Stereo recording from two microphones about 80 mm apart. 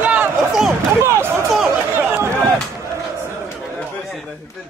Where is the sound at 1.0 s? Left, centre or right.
Right.